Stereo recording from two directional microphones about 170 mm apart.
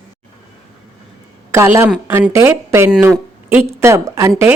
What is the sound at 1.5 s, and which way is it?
Speech, 15° right (ahead or behind).